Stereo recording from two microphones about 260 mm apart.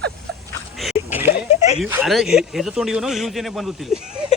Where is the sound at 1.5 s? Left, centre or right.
Left.